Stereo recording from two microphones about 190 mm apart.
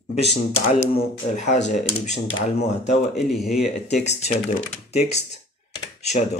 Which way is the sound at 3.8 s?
35° left (ahead or behind).